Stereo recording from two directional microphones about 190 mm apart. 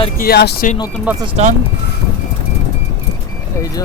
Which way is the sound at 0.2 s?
55° left (ahead or behind).